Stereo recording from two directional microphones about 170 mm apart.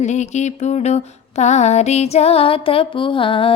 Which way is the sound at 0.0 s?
45° left (ahead or behind).